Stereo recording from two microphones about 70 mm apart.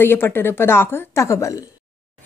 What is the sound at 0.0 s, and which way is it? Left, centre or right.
Speech, left.